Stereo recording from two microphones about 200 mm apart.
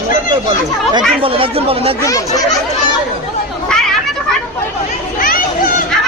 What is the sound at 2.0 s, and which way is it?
Speech, 15° left (ahead or behind).